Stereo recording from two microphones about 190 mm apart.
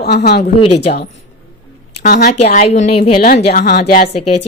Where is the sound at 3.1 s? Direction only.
50° left (ahead or behind).